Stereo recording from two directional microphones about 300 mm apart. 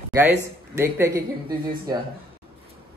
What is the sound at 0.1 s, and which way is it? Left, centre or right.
A woman's voice, centre.